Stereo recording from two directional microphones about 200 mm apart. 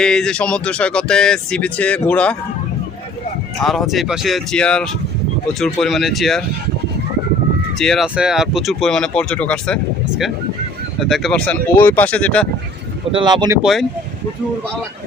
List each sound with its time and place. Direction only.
0.0 s speech: 5° left (ahead or behind)
3.6 s speech: centre (ahead or behind)
7.8 s speech: centre (ahead or behind)
13.1 s speech: 25° right (ahead or behind)
13.6 s speech: centre (ahead or behind)